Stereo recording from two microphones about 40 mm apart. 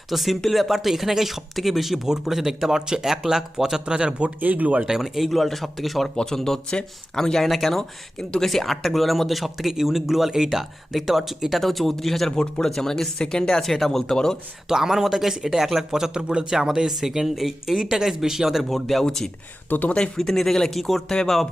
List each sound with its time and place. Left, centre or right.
0.1 s speech: centre; by 4.3 s right
4.4 s speech: right
4.9 s speech: centre
5.3 s speech: centre
7.4 s speech: centre
8.2 s speech: centre
8.4 s speech: centre
12.4 s speech: centre
14.7 s speech: centre
16.6 s speech: centre
18.7 s speech: centre